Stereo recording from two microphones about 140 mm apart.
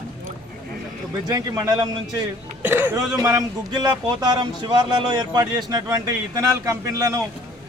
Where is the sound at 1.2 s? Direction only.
30° right (ahead or behind).